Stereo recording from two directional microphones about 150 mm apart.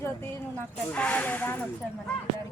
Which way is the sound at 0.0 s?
15° left (ahead or behind).